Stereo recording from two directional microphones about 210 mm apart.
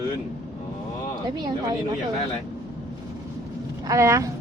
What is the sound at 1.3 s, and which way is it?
Speech, 20° right (ahead or behind).